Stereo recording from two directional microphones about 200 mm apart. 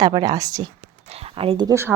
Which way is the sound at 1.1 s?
30° right (ahead or behind).